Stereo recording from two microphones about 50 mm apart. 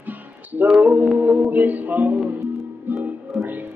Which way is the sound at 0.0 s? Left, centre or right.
Right.